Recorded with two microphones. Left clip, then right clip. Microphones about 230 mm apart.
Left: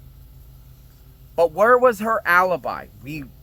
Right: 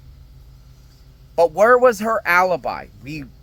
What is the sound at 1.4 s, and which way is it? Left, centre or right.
Speech, centre.